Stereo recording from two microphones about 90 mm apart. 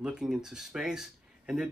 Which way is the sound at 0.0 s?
10° right (ahead or behind).